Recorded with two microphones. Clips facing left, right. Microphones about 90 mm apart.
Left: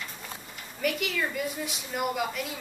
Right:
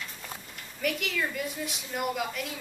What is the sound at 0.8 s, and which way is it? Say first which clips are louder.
A woman's voice: left 1 dB; centre (ahead or behind).